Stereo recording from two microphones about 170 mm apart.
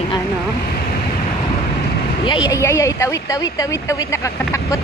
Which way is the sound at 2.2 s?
25° left (ahead or behind).